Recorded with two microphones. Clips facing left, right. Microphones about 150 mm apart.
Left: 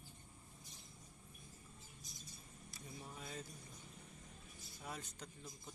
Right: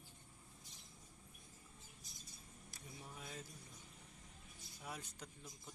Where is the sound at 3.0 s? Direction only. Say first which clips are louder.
Left 2 dB; 5° right (ahead or behind).